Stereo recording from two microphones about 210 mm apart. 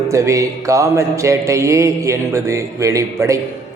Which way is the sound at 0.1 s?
15° right (ahead or behind).